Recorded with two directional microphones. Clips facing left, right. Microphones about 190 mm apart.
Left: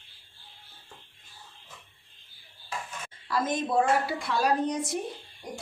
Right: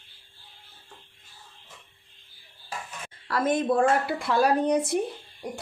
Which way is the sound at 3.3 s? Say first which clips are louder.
Right 4 dB; 60° right (ahead or behind).